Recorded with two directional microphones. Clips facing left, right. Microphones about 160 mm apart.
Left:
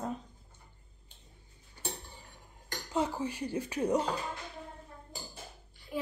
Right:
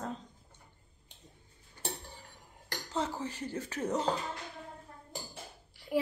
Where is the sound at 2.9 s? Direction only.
15° left (ahead or behind).